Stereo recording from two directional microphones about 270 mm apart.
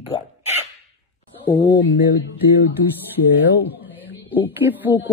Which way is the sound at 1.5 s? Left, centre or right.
Centre.